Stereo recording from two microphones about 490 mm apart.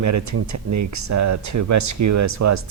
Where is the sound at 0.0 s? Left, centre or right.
Right.